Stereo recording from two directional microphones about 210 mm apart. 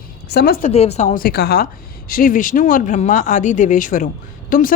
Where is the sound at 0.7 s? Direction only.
30° left (ahead or behind).